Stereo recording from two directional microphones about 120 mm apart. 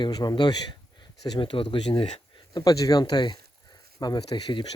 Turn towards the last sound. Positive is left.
turn(degrees=35)  # may be behind; listen again after turning